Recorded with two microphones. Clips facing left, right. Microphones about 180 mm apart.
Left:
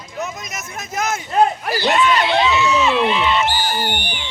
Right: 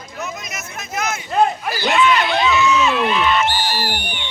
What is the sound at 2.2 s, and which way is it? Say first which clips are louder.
Speech: even; 25° left (ahead or behind).